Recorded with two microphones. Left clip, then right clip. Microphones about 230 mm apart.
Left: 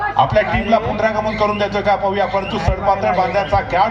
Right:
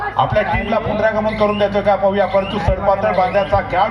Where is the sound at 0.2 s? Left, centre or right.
Left.